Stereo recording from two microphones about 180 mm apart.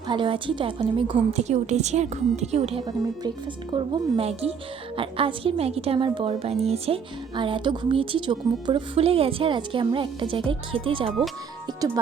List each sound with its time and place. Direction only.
0.1 s a woman's voice: 30° right (ahead or behind)